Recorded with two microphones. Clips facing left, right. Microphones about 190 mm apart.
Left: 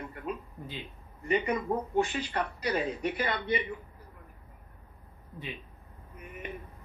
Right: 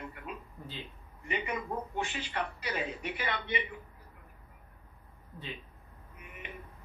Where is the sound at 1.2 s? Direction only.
40° left (ahead or behind).